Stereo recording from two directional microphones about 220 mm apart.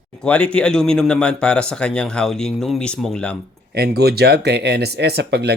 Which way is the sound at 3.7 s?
45° right (ahead or behind).